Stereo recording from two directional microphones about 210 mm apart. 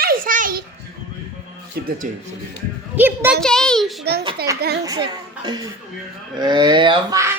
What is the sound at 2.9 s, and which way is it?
Speech, 10° right (ahead or behind).